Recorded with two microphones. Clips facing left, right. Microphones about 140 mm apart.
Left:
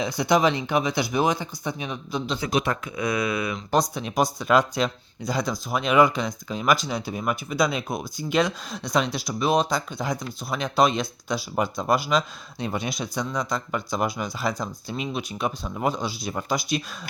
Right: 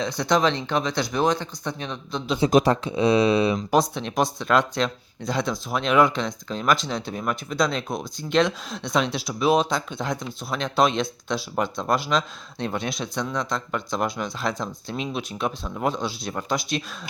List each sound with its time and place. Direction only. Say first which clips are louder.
0.0 s speech: left 1 dB; 10° left (ahead or behind)
2.5 s speech: right 7 dB; 45° right (ahead or behind)
2.8 s speech: right 7 dB; 30° right (ahead or behind)
3.7 s speech: right 2 dB; centre (ahead or behind)